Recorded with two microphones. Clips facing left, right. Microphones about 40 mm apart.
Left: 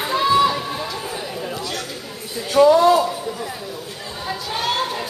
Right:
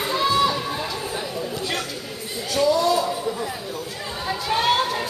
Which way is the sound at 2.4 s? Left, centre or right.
Left.